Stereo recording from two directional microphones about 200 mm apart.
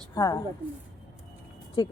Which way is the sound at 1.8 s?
20° left (ahead or behind).